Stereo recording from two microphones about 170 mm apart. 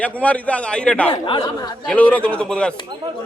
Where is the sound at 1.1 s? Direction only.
30° left (ahead or behind).